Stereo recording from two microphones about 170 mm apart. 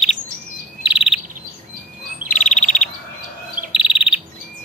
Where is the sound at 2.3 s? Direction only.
50° left (ahead or behind).